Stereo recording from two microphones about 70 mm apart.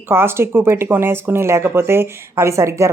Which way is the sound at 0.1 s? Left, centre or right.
Right.